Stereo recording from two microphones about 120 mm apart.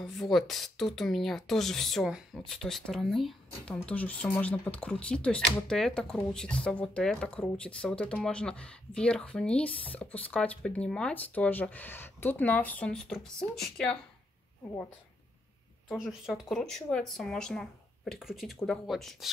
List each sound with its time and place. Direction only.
0.0 s speech: centre (ahead or behind)
15.9 s speech: 5° right (ahead or behind)